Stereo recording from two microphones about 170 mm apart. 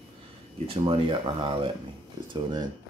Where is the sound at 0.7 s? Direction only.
30° right (ahead or behind).